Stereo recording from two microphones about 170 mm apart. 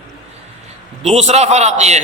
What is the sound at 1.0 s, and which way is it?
A man's voice, 40° right (ahead or behind).